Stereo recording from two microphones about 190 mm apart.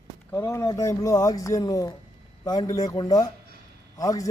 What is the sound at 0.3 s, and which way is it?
A man's voice, 15° left (ahead or behind).